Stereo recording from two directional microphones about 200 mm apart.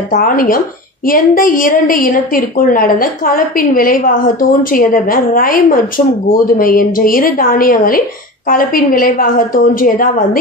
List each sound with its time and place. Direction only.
0.1 s a woman's voice: 45° left (ahead or behind)